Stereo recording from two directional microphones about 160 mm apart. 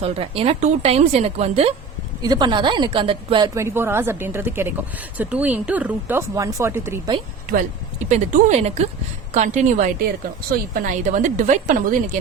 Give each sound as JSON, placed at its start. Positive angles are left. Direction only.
{"t": 0.0, "sound": "a woman's voice", "side_deg": -40}
{"t": 2.2, "sound": "a woman's voice", "side_deg": -25}
{"t": 3.5, "sound": "speech", "side_deg": -15}
{"t": 7.4, "sound": "speech", "side_deg": -50}
{"t": 10.5, "sound": "speech", "side_deg": -60}